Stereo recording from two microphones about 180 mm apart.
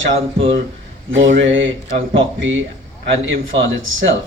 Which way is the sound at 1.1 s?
90° right.